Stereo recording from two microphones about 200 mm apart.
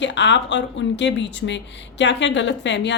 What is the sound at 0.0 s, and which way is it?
A woman's voice, 65° left (ahead or behind).